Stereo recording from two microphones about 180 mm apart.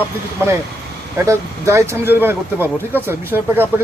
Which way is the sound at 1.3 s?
15° right (ahead or behind).